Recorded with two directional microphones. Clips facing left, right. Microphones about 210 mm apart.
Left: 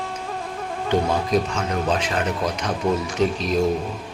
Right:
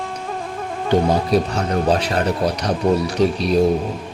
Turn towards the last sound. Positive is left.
turn(degrees=-35)  # may be behind; listen again after turning